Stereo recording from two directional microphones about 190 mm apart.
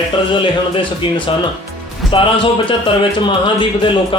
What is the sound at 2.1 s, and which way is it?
Speech, 25° left (ahead or behind).